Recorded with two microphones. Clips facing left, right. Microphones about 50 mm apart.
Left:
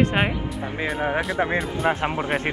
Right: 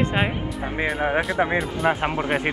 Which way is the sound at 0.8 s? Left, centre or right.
Centre.